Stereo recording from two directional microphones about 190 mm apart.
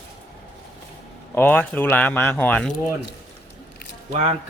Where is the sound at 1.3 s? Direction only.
10° left (ahead or behind).